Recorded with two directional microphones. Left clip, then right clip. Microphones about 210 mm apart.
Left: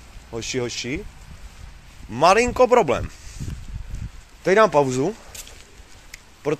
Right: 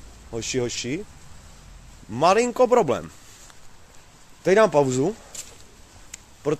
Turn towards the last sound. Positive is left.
turn(degrees=-10)  # may be behind; listen again after turning